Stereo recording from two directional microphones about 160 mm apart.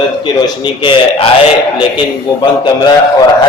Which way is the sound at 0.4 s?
30° left (ahead or behind).